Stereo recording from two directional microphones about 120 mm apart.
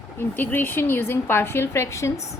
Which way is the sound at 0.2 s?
15° left (ahead or behind).